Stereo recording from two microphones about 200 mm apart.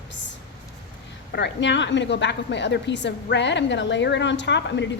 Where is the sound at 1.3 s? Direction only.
60° left (ahead or behind).